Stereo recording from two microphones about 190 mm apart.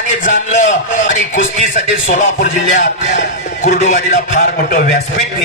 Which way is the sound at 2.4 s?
40° left (ahead or behind).